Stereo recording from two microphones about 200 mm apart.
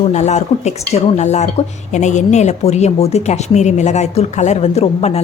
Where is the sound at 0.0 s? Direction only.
35° left (ahead or behind).